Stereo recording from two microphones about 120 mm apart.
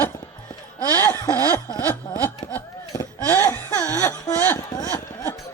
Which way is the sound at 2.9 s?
25° left (ahead or behind).